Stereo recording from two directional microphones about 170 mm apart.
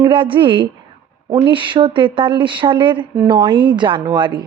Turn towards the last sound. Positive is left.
turn(degrees=-25)  # may be behind; listen again after turning